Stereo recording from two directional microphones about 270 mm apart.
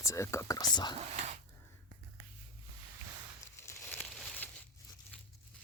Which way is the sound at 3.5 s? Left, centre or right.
Centre.